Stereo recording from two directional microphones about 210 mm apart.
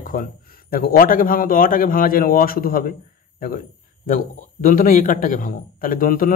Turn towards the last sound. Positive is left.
turn(degrees=45)  # may be behind; listen again after turning